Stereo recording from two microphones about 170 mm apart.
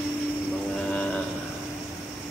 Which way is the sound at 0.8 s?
5° left (ahead or behind).